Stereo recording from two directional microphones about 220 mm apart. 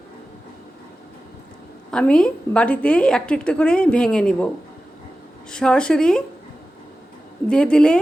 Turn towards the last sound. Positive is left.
turn(degrees=5)  # may be behind; listen again after turning